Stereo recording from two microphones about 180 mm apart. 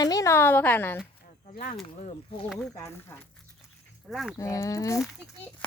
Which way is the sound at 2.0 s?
40° left (ahead or behind).